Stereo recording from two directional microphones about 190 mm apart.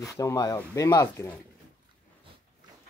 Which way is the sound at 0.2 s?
15° left (ahead or behind).